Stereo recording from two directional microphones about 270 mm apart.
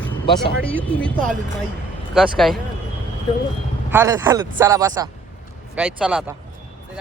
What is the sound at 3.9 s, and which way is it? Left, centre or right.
Speech, centre.